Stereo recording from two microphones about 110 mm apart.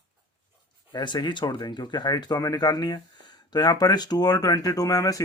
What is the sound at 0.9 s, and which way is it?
Speech, 40° left (ahead or behind).